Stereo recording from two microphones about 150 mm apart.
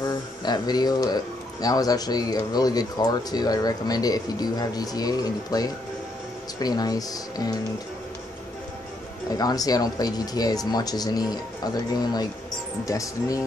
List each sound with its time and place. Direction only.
0.0 s speech: 25° left (ahead or behind)
9.4 s speech: 25° left (ahead or behind)